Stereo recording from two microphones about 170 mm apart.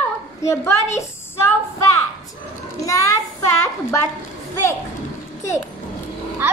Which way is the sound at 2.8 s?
20° left (ahead or behind).